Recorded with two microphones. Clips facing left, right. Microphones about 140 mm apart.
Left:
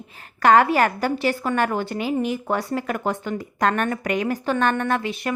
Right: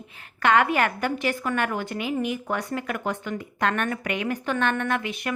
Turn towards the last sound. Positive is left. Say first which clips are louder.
# left 3 dB
turn(degrees=30)  # may be behind; listen again after turning